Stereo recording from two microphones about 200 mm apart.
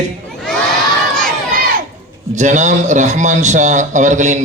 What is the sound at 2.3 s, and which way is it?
A man's voice, 35° right (ahead or behind).